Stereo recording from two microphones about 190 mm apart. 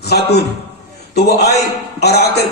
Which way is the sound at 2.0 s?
60° left (ahead or behind).